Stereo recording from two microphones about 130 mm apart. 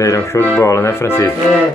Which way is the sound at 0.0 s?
25° left (ahead or behind).